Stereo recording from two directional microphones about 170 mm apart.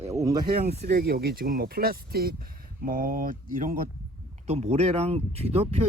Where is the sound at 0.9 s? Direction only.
65° right (ahead or behind).